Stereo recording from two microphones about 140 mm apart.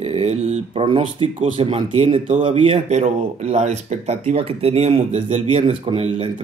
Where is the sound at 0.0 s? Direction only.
45° right (ahead or behind).